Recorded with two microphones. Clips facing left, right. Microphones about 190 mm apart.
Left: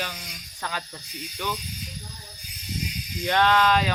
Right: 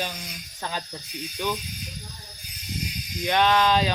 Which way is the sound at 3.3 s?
15° right (ahead or behind).